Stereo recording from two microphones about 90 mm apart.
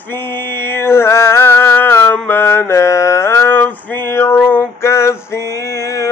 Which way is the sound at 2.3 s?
25° left (ahead or behind).